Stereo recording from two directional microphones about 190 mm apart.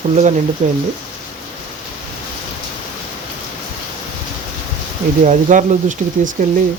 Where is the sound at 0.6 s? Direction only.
40° right (ahead or behind).